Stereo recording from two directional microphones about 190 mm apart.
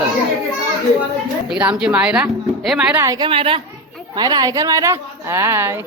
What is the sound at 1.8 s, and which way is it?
Speech, 5° right (ahead or behind).